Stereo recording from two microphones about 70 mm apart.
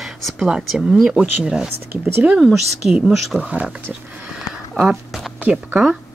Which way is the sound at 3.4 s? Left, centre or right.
Centre.